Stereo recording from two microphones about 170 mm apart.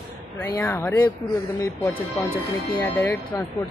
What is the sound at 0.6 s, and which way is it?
Speech, 10° left (ahead or behind).